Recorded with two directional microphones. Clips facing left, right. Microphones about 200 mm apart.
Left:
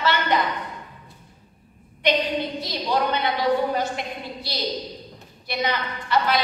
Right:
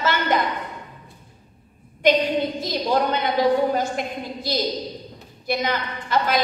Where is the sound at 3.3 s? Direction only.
45° right (ahead or behind).